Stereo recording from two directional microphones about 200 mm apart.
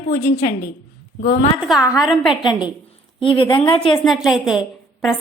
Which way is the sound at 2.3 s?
25° left (ahead or behind).